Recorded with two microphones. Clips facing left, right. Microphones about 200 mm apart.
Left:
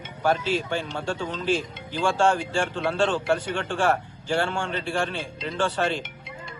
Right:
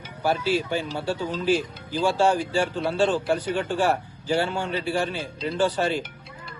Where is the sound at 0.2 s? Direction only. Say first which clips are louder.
Even; 10° right (ahead or behind).